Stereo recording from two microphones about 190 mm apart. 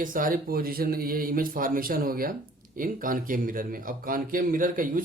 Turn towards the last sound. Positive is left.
turn(degrees=-45)  # may be behind; listen again after turning